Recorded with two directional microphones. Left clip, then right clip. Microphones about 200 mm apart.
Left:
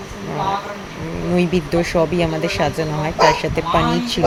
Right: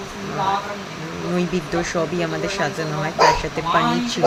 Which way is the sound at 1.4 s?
20° left (ahead or behind).